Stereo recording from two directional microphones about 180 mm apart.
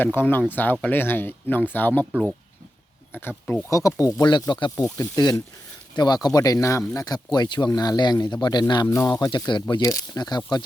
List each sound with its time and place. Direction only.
0.0 s speech: 10° left (ahead or behind)
3.1 s speech: 10° left (ahead or behind)